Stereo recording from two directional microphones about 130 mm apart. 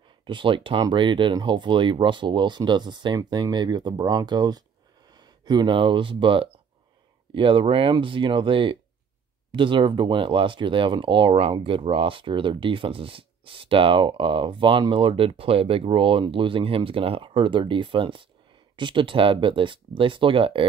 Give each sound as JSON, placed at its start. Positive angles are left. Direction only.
{"t": 0.3, "sound": "speech", "side_deg": -40}